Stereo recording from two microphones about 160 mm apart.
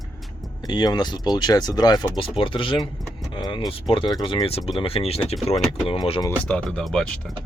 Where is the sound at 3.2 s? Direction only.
25° left (ahead or behind).